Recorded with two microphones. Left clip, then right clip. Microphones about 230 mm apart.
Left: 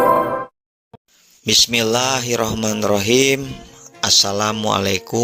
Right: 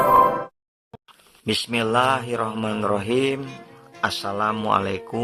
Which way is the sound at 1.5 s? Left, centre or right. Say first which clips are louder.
Left 8 dB; left.